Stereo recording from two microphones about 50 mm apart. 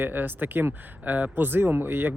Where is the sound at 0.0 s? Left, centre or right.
Right.